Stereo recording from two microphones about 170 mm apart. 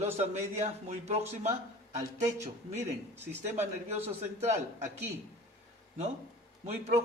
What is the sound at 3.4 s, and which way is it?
Speech, 40° right (ahead or behind).